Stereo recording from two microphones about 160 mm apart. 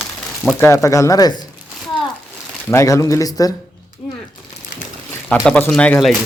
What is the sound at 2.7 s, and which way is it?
Speech, 20° left (ahead or behind).